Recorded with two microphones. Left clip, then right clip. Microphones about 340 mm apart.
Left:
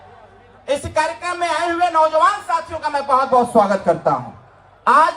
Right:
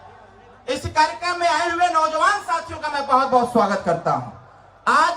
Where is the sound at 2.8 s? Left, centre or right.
Centre.